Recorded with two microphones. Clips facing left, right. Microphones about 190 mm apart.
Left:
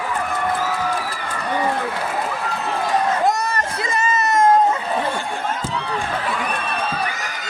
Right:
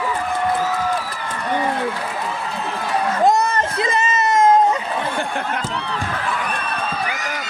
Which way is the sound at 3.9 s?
20° right (ahead or behind).